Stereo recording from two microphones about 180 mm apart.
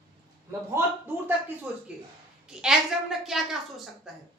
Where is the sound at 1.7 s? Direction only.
5° right (ahead or behind).